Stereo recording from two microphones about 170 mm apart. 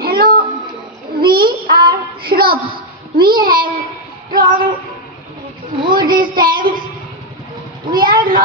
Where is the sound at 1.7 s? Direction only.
60° right (ahead or behind).